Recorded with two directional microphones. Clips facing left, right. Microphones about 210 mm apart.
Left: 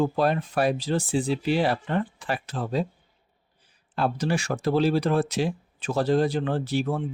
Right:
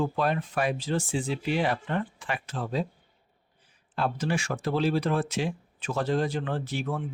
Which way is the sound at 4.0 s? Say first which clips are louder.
Left 3 dB; 35° left (ahead or behind).